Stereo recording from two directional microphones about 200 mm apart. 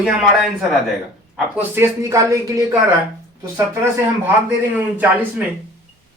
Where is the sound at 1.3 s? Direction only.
10° right (ahead or behind).